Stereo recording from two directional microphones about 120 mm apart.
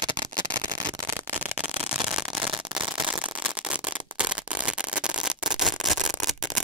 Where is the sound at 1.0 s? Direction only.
20° right (ahead or behind); by 6.6 s centre (ahead or behind).